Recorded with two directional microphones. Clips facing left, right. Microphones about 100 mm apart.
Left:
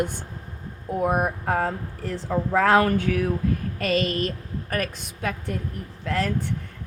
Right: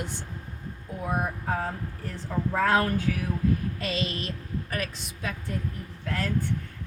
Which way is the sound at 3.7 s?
50° left (ahead or behind).